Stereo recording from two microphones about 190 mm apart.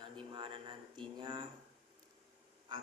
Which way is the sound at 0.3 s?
25° right (ahead or behind).